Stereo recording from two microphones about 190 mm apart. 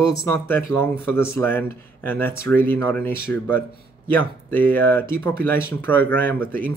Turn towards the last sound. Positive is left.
turn(degrees=10)  # may be behind; listen again after turning